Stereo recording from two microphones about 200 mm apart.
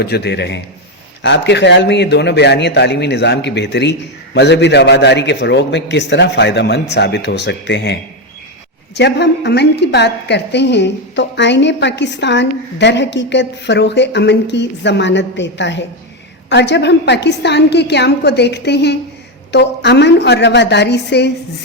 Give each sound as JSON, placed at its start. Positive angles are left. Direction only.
{"t": 0.0, "sound": "a woman's voice", "side_deg": 55}
{"t": 9.0, "sound": "a woman's voice", "side_deg": 60}